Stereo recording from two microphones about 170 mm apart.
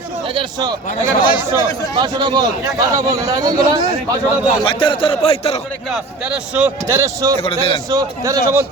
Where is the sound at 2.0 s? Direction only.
25° right (ahead or behind).